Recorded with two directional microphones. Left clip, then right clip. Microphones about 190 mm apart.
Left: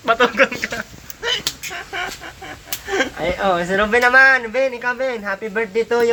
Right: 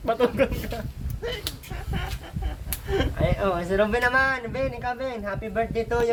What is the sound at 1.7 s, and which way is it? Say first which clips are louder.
Chicken: left 10 dB; 20° left (ahead or behind).